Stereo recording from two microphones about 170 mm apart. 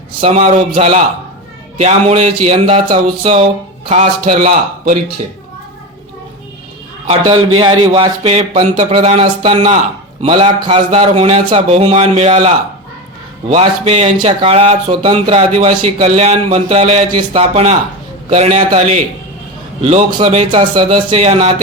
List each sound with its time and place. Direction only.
0.2 s speech: 35° right (ahead or behind)
7.1 s a man's voice: 30° right (ahead or behind)